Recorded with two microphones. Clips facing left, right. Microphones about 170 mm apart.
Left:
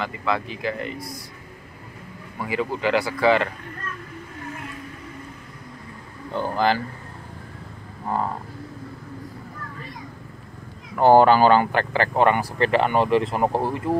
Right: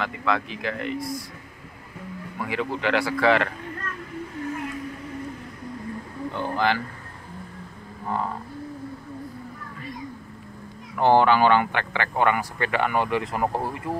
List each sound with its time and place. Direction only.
0.0 s speech: centre (ahead or behind)
2.3 s speech: 5° left (ahead or behind)
6.3 s speech: 35° left (ahead or behind)
11.0 s speech: 40° left (ahead or behind)